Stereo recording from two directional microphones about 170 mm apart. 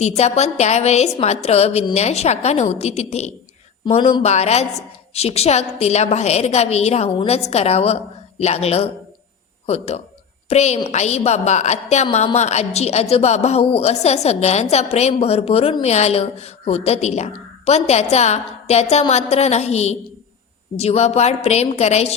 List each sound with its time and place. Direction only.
0.0 s a woman's voice: 40° left (ahead or behind)